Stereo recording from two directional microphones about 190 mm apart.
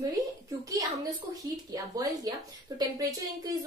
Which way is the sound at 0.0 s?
20° right (ahead or behind).